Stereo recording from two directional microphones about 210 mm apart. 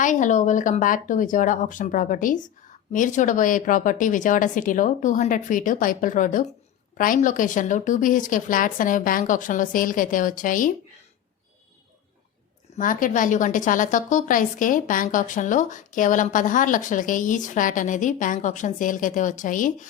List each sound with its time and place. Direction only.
0.0 s a woman's voice: 35° left (ahead or behind)
12.7 s a woman's voice: 40° left (ahead or behind)